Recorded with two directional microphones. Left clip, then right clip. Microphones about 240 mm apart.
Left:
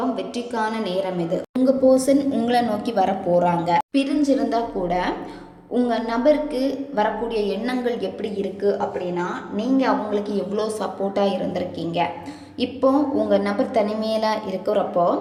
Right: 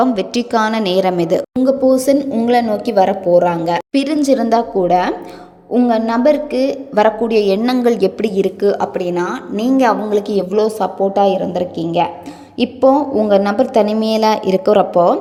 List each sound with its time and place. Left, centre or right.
0.0 s a woman's voice: right